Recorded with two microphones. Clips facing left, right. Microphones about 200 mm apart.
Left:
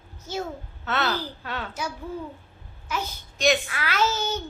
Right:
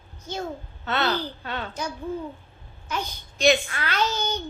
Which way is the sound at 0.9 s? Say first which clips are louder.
Right 1 dB; 5° left (ahead or behind).